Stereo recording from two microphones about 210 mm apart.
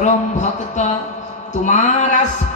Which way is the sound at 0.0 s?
35° left (ahead or behind).